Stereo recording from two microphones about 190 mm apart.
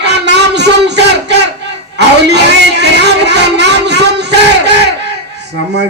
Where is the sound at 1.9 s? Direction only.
60° right (ahead or behind).